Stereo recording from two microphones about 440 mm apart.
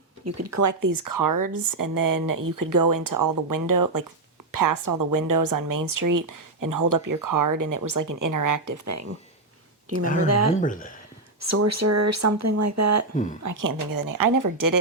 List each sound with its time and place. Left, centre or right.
0.3 s a woman's voice: right
10.2 s speech: right
10.6 s speech: centre
11.3 s a woman's voice: right